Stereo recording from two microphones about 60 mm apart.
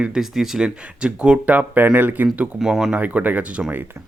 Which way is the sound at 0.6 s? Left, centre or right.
Centre.